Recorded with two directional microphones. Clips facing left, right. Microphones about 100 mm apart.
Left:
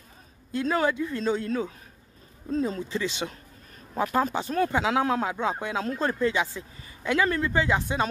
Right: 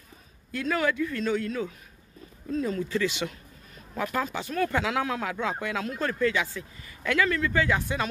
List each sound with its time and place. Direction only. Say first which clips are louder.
0.5 s speech: left 2 dB; 25° left (ahead or behind)